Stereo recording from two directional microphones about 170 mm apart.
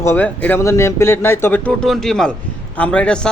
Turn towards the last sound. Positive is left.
turn(degrees=5)  # may be behind; listen again after turning